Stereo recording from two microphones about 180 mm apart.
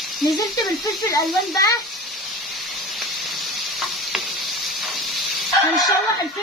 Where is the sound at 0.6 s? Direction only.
20° left (ahead or behind).